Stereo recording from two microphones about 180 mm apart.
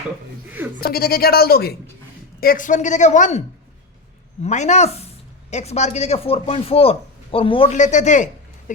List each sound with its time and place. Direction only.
0.8 s a woman's voice: 55° left (ahead or behind)
4.4 s speech: 40° left (ahead or behind)